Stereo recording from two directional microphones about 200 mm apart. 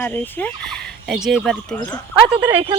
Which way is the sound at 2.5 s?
25° right (ahead or behind).